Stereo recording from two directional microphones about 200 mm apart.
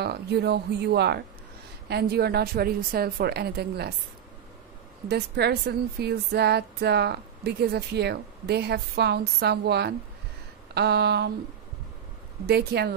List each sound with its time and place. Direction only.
0.0 s a woman's voice: 55° right (ahead or behind)
5.0 s a woman's voice: 55° right (ahead or behind)
12.4 s a woman's voice: 55° right (ahead or behind)